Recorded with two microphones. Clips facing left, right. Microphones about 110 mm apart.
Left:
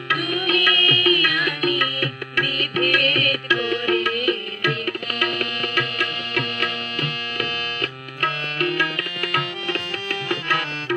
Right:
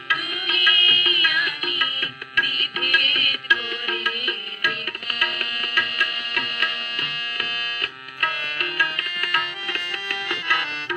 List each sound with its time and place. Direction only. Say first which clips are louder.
0.3 s music: left 6 dB; 25° left (ahead or behind)